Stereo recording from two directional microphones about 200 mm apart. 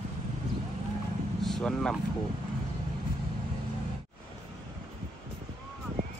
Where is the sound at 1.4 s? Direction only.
Centre (ahead or behind).